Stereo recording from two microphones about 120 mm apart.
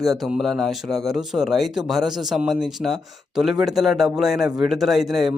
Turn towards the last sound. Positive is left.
turn(degrees=0)  # may be behind; listen again after turning